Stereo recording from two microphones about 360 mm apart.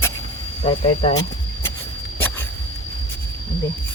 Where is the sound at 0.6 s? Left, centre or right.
Centre.